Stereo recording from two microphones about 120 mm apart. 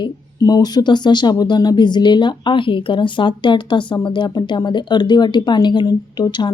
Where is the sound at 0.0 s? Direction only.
30° left (ahead or behind).